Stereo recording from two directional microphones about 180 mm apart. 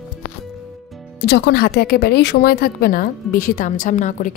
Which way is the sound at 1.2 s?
65° left (ahead or behind).